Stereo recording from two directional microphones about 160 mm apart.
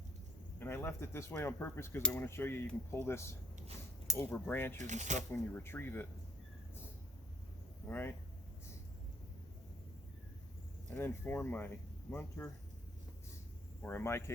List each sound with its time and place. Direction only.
0.6 s speech: 15° left (ahead or behind)
4.8 s speech: 50° right (ahead or behind)
5.3 s speech: 10° left (ahead or behind)
7.9 s speech: 15° left (ahead or behind)
10.9 s speech: 15° left (ahead or behind)
13.8 s speech: 15° left (ahead or behind)